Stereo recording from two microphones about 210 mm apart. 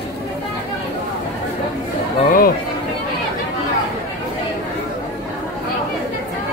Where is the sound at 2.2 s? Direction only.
40° left (ahead or behind).